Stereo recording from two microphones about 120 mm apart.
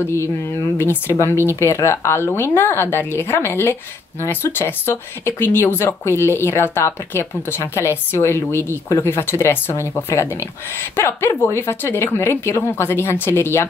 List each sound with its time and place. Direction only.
0.0 s speech: 20° left (ahead or behind)